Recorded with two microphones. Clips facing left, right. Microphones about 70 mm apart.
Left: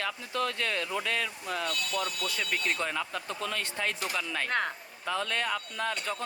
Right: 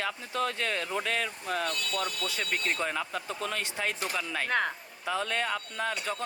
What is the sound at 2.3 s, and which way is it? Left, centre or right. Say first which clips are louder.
Speech: even; right.